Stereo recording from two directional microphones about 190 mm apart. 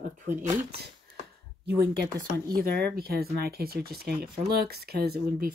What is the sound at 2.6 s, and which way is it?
Speech, 55° right (ahead or behind).